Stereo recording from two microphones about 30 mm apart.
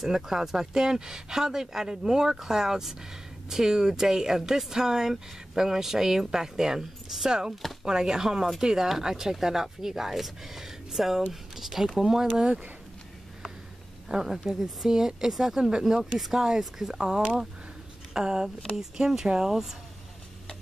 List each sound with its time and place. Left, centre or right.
0.1 s speech: centre
14.0 s speech: centre
16.4 s speech: centre